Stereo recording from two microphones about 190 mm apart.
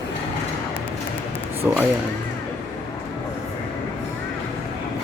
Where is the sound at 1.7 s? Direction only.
5° right (ahead or behind).